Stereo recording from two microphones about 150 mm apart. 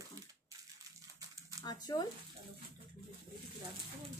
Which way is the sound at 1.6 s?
25° left (ahead or behind).